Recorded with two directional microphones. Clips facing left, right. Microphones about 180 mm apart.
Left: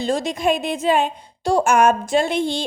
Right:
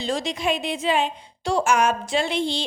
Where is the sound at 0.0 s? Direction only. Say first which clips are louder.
Left 5 dB; 50° left (ahead or behind).